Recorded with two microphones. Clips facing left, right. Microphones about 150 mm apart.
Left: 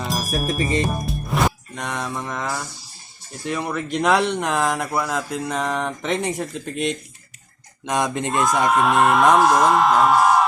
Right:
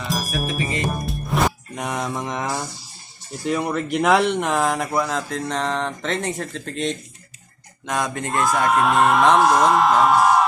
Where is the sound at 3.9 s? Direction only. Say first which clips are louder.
Right 1 dB; 5° right (ahead or behind).